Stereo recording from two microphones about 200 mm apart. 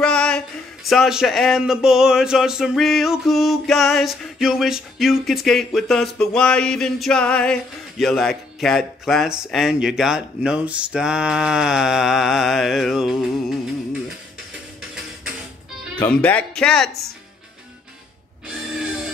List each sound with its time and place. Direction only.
0.0 s a sound: 5° left (ahead or behind)
0.8 s speech: centre (ahead or behind)
16.0 s speech: 5° left (ahead or behind)